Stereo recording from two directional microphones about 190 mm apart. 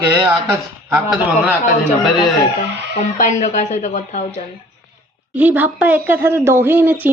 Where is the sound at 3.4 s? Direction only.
40° left (ahead or behind).